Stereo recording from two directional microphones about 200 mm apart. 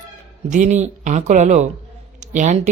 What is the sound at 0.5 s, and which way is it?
A woman's voice, 35° right (ahead or behind).